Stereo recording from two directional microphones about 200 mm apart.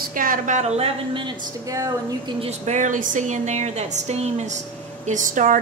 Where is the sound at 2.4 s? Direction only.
35° right (ahead or behind).